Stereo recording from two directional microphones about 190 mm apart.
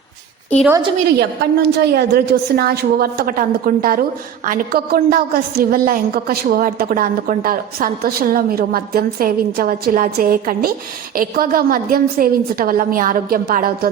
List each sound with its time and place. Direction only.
1.2 s a woman's voice: 60° right (ahead or behind)